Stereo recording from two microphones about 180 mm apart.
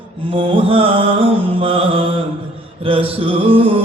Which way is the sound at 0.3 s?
30° right (ahead or behind).